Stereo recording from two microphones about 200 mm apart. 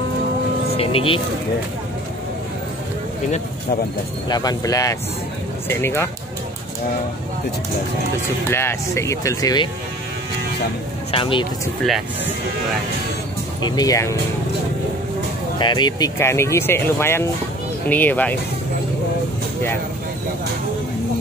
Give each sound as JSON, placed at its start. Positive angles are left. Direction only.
{"t": 0.7, "sound": "vehicle", "side_deg": 30}
{"t": 4.3, "sound": "speech", "side_deg": 20}
{"t": 8.5, "sound": "speech", "side_deg": 10}
{"t": 11.1, "sound": "speech", "side_deg": 25}
{"t": 13.6, "sound": "speech", "side_deg": 20}
{"t": 15.6, "sound": "speech", "side_deg": 20}